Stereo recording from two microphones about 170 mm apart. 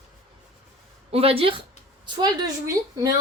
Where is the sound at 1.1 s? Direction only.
35° right (ahead or behind).